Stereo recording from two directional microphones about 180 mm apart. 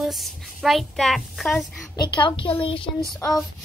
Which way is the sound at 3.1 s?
5° left (ahead or behind).